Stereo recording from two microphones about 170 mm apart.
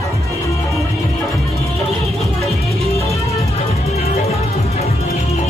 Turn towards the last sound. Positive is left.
turn(degrees=40)  # may be behind; listen again after turning